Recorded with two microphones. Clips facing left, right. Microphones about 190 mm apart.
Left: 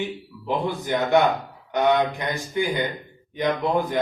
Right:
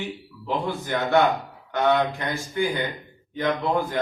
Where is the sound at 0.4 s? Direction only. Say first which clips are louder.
Left 2 dB; 20° left (ahead or behind).